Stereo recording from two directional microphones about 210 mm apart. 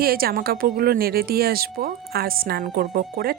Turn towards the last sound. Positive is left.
turn(degrees=-45)  # may be behind; listen again after turning